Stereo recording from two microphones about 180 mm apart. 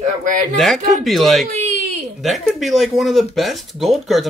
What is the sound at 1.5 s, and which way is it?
Baby cry, 40° right (ahead or behind).